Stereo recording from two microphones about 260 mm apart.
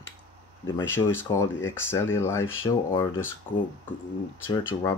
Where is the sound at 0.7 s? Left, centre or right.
Left.